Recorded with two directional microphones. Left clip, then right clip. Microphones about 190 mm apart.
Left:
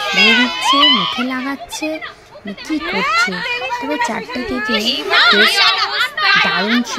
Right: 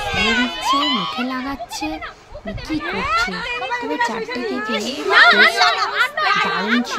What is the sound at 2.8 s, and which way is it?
Speech, 40° left (ahead or behind).